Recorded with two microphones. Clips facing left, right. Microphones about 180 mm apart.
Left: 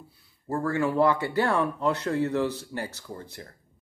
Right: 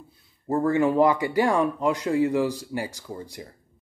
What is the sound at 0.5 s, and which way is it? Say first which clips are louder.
Speech: right 5 dB; 20° right (ahead or behind).